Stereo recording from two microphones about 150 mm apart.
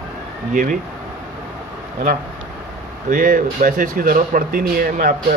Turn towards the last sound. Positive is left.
turn(degrees=-65)  # may be behind; listen again after turning